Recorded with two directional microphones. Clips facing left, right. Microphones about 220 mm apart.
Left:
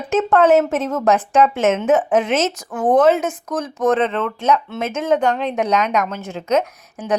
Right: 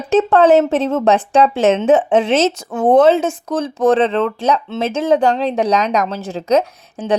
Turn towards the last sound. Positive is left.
turn(degrees=-30)  # may be behind; listen again after turning